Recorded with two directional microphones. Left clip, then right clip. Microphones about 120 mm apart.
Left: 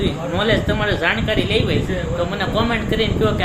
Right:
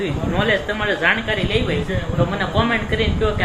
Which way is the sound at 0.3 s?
25° left (ahead or behind).